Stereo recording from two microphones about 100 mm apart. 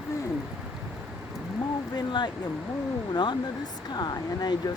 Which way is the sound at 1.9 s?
45° left (ahead or behind).